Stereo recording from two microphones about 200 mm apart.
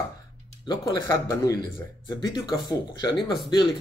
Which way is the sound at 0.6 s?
20° left (ahead or behind).